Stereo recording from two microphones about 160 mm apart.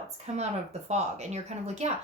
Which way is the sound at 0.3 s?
45° right (ahead or behind).